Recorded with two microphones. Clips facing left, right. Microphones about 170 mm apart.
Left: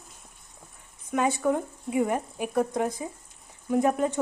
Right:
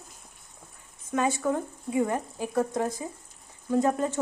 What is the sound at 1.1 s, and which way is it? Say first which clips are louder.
Speech: left 2 dB; 20° left (ahead or behind).